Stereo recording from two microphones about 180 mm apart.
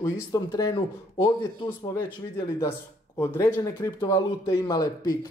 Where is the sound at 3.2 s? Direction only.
15° left (ahead or behind).